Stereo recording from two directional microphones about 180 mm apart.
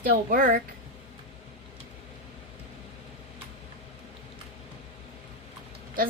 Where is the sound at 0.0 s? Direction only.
50° right (ahead or behind).